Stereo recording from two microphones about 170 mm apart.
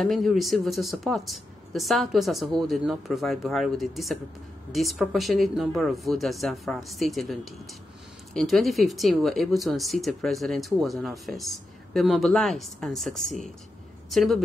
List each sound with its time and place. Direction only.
0.0 s speech: centre (ahead or behind)